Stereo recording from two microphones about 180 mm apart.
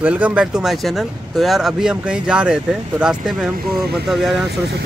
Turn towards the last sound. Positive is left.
turn(degrees=0)  # may be behind; listen again after turning